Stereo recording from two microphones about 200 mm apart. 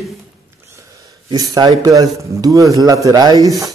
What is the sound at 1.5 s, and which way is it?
Speech, 20° right (ahead or behind).